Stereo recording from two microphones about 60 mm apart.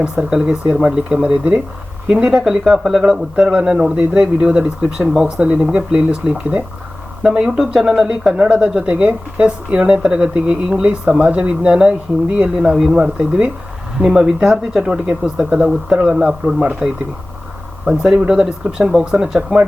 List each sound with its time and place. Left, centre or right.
0.0 s speech: centre
2.0 s speech: centre